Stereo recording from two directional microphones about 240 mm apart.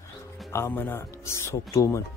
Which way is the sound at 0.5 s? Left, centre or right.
Centre.